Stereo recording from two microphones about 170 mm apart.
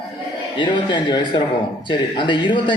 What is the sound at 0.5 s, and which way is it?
Speech, 25° left (ahead or behind).